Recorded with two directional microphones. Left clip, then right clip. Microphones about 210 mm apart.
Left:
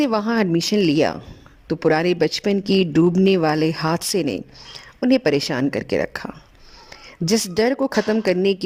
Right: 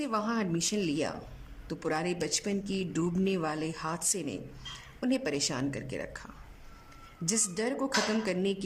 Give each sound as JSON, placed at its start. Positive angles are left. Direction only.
{"t": 0.0, "sound": "speech", "side_deg": 45}
{"t": 3.2, "sound": "speech", "side_deg": 45}